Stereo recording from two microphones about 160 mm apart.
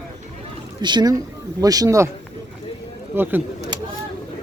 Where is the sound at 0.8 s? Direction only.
30° right (ahead or behind).